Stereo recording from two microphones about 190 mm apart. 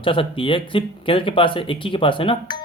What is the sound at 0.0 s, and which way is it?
Speech, 25° left (ahead or behind).